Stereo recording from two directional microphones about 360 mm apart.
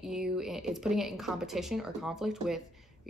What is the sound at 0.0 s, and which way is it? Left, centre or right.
A woman's voice, centre.